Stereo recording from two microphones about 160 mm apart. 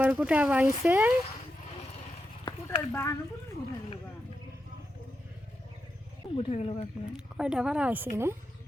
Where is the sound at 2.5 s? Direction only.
30° left (ahead or behind).